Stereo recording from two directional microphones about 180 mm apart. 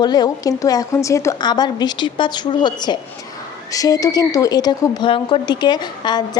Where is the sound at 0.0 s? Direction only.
25° left (ahead or behind).